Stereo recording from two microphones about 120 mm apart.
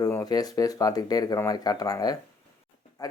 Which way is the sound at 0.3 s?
30° left (ahead or behind).